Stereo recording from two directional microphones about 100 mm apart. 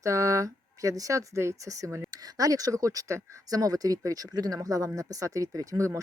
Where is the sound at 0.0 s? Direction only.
35° right (ahead or behind).